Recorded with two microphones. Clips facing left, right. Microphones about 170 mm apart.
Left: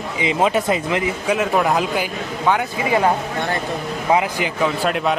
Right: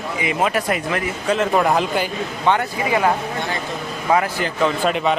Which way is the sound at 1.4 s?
Centre (ahead or behind).